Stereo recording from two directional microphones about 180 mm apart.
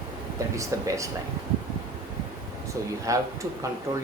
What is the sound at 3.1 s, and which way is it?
Speech, 15° right (ahead or behind).